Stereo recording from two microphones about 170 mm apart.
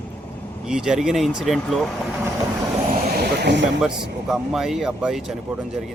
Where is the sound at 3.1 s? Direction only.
75° right (ahead or behind).